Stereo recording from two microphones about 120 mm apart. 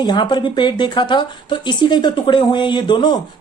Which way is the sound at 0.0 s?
35° left (ahead or behind).